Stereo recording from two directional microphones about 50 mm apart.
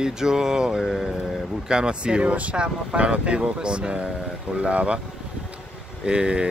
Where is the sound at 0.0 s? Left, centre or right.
Centre.